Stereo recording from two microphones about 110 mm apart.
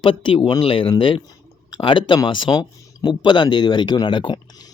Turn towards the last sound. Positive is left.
turn(degrees=45)  # may be behind; listen again after turning